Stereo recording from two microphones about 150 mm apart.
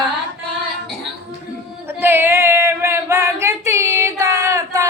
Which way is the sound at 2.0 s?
15° right (ahead or behind).